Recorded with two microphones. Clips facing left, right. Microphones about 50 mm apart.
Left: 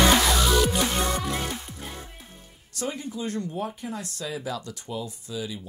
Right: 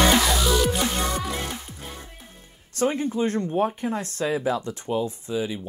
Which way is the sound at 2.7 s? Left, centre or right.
Right.